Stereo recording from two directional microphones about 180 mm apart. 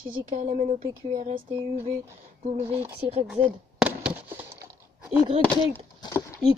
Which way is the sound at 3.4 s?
10° right (ahead or behind).